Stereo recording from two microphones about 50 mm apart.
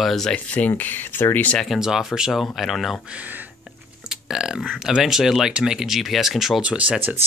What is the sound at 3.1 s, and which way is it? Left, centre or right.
Speech, right.